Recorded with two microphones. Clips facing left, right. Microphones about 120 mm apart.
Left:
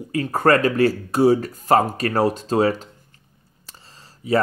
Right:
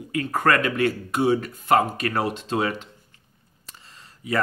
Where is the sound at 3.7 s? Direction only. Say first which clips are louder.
Left 1 dB; 35° left (ahead or behind).